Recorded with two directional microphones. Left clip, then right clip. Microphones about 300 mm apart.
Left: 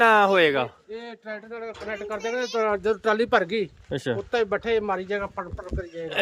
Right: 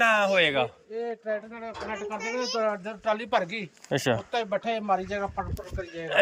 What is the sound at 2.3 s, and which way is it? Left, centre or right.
Speech, centre.